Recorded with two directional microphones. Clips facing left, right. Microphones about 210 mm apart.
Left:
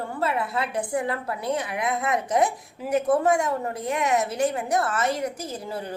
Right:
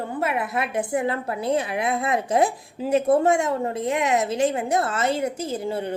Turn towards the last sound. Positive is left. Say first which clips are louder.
# right 6 dB
turn(degrees=-25)  # may be behind; listen again after turning